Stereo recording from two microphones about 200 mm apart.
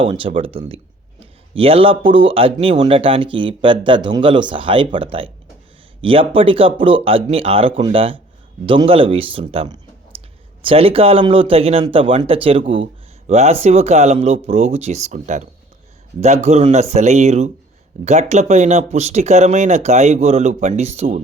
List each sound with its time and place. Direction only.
0.0 s speech: 25° right (ahead or behind)